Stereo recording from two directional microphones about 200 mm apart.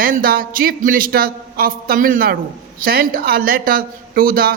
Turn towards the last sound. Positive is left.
turn(degrees=-45)  # may be behind; listen again after turning